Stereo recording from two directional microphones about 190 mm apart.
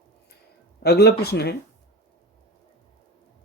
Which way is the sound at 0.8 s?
60° left (ahead or behind).